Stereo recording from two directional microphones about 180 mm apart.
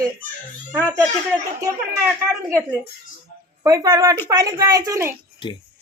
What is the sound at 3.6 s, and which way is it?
Speech, 20° right (ahead or behind).